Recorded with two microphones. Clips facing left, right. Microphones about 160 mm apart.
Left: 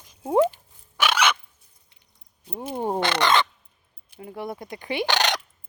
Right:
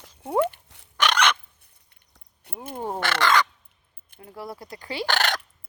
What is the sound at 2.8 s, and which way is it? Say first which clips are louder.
Crow: left 2 dB; 20° left (ahead or behind).